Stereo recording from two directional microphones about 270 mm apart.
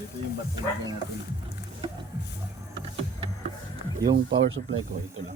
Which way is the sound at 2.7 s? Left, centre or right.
Centre.